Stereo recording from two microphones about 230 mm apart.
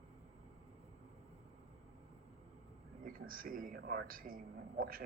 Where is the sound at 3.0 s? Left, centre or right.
Right.